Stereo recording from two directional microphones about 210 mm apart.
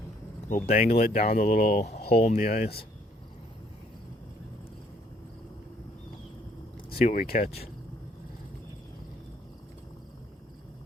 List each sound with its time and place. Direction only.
0.5 s speech: 40° left (ahead or behind)
2.3 s speech: 45° left (ahead or behind)
6.9 s speech: 35° left (ahead or behind)